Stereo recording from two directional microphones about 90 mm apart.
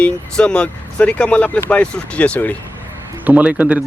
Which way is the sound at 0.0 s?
10° left (ahead or behind).